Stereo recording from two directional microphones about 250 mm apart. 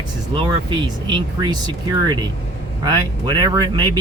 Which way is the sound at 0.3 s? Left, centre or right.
Centre.